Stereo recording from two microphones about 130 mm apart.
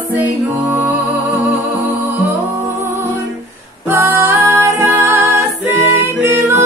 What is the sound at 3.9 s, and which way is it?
Music, 20° right (ahead or behind).